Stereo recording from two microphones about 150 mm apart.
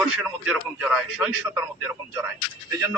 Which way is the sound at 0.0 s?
5° right (ahead or behind).